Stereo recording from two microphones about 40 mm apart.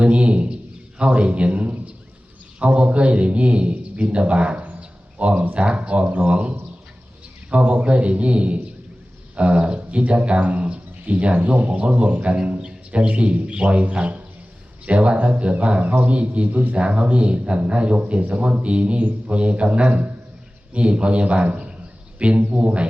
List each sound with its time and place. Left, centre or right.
0.0 s a man's voice: right
7.5 s speech: right